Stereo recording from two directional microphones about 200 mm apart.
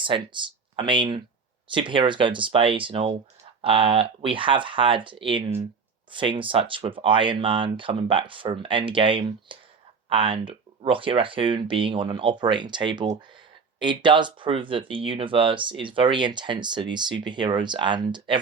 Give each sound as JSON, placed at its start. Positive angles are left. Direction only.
{"t": 0.0, "sound": "speech", "side_deg": -25}